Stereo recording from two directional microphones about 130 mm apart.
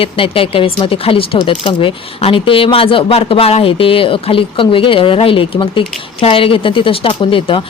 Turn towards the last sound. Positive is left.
turn(degrees=40)  # may be behind; listen again after turning